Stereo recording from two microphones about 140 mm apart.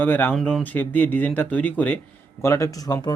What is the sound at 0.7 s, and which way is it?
Speech, 15° left (ahead or behind).